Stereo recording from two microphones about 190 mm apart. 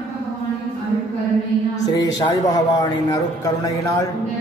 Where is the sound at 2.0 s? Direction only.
20° left (ahead or behind).